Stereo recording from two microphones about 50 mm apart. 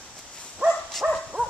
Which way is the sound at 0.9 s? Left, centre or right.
Centre.